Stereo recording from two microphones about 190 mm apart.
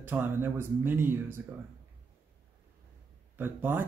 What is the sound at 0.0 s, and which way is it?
Speech, 10° right (ahead or behind).